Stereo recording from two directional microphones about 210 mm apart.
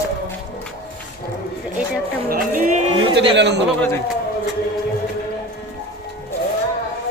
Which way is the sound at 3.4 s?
55° right (ahead or behind).